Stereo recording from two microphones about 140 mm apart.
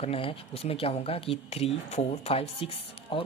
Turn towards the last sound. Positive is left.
turn(degrees=40)  # may be behind; listen again after turning